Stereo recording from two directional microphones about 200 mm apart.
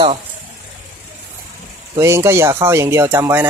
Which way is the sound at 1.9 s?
15° right (ahead or behind).